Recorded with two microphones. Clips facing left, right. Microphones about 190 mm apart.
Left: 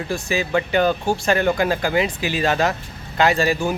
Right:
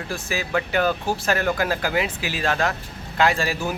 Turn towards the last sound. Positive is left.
turn(degrees=0)  # may be behind; listen again after turning